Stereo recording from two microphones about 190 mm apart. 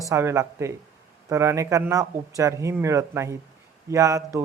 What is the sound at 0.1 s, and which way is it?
Speech, 15° right (ahead or behind).